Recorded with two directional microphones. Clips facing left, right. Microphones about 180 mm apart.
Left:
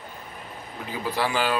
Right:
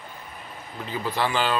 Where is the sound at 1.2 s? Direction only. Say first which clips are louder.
Even; 10° left (ahead or behind).